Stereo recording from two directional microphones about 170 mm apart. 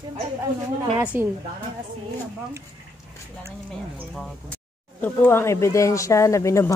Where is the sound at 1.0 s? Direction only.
15° right (ahead or behind).